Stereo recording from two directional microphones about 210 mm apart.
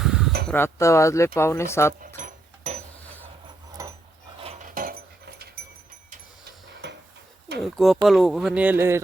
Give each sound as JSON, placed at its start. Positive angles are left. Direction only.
{"t": 0.0, "sound": "a sound", "side_deg": -5}
{"t": 0.4, "sound": "speech", "side_deg": 10}
{"t": 2.0, "sound": "dog", "side_deg": -40}
{"t": 3.8, "sound": "a sound", "side_deg": -15}
{"t": 4.4, "sound": "dog", "side_deg": -30}
{"t": 6.8, "sound": "dishes", "side_deg": -55}
{"t": 7.6, "sound": "speech", "side_deg": 0}